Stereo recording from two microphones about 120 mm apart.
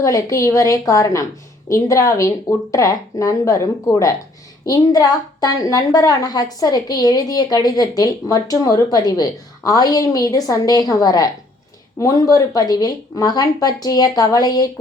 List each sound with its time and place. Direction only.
0.0 s a woman's voice: 30° left (ahead or behind)